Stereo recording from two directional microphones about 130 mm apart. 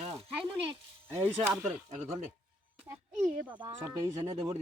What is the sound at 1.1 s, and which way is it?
Speech, 15° right (ahead or behind).